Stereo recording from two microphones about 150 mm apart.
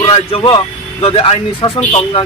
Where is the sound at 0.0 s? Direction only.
35° left (ahead or behind).